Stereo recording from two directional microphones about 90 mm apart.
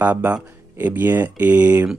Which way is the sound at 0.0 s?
20° right (ahead or behind).